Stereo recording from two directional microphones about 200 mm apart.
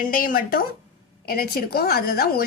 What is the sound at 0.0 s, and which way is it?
A woman's voice, 45° left (ahead or behind).